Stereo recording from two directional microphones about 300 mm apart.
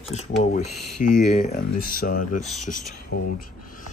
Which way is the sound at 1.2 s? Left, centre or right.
Left.